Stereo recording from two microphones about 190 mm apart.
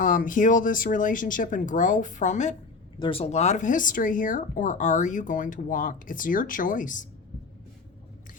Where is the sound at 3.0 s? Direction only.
30° left (ahead or behind).